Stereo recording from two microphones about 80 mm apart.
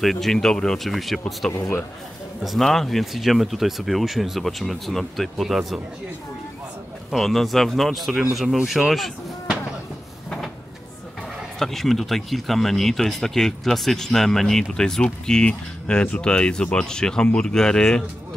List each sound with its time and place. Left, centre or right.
0.0 s speech: centre
2.4 s speech: centre
7.1 s speech: centre
11.6 s speech: centre